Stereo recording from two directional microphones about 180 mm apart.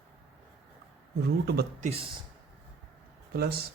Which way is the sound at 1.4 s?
60° right (ahead or behind).